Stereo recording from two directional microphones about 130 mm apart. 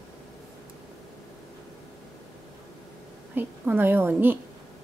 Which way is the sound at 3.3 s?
15° right (ahead or behind).